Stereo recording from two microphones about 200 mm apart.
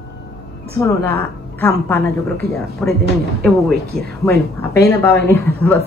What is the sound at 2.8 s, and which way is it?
Speech, 5° left (ahead or behind).